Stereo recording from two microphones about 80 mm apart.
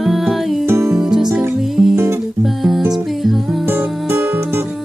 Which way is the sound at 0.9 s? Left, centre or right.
Centre.